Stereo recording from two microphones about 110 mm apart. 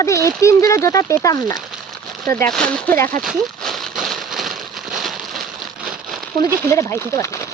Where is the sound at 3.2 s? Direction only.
Centre (ahead or behind).